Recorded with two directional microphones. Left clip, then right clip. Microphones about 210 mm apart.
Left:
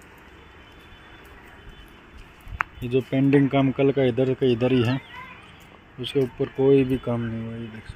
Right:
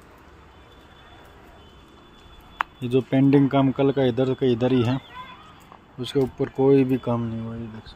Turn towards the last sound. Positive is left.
turn(degrees=-10)  # may be behind; listen again after turning